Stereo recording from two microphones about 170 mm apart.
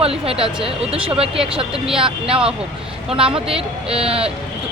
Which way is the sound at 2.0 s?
35° right (ahead or behind).